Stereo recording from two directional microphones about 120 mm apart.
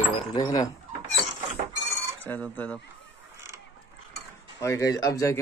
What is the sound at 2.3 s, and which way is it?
Speech, 15° left (ahead or behind).